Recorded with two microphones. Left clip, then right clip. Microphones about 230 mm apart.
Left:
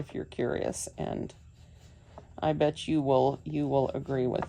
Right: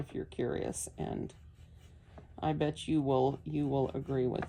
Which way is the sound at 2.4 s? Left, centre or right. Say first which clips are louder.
Left 6 dB; left.